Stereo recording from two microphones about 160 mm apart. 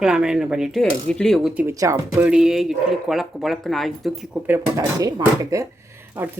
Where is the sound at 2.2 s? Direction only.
5° right (ahead or behind).